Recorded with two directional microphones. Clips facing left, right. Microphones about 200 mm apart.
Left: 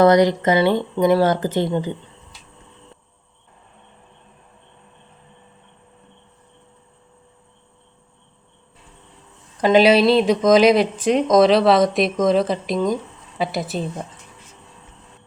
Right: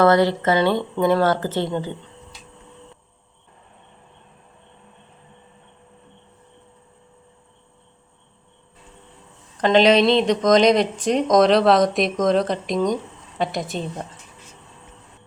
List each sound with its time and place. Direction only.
0.0 s speech: 15° left (ahead or behind)
9.6 s speech: 5° left (ahead or behind)